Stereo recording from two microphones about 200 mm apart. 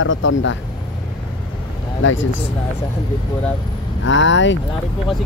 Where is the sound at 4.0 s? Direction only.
65° left (ahead or behind).